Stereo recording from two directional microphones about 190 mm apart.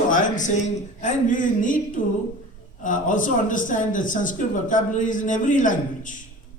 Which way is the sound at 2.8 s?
45° left (ahead or behind).